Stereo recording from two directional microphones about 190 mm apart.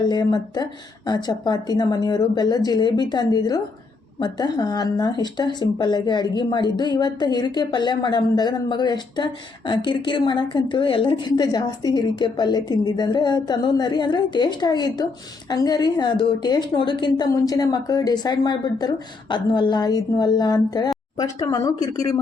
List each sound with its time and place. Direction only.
0.0 s speech: 20° left (ahead or behind)